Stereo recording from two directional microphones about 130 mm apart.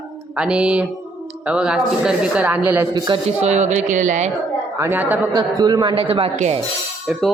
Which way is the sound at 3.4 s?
60° right (ahead or behind).